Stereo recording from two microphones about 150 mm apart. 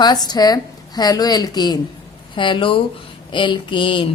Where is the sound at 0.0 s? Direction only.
30° left (ahead or behind).